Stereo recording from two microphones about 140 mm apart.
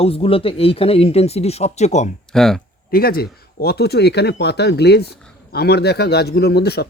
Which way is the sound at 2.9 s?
90° left.